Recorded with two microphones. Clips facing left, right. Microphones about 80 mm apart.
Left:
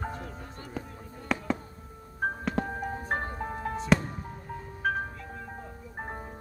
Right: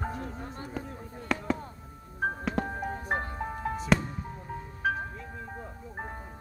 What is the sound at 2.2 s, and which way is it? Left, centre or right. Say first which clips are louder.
Music: even; centre.